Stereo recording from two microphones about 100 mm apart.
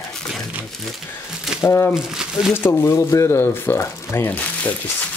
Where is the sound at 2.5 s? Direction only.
25° left (ahead or behind).